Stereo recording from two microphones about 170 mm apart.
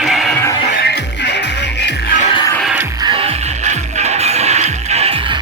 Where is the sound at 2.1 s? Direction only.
45° left (ahead or behind).